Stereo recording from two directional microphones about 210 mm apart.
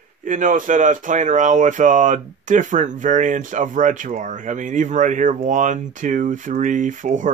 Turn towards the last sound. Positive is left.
turn(degrees=-40)  # may be behind; listen again after turning